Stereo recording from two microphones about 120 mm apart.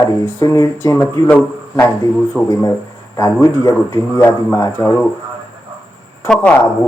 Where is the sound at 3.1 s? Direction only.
30° left (ahead or behind).